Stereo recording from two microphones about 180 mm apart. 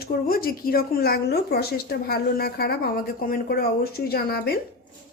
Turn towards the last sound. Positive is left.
turn(degrees=60)  # may be behind; listen again after turning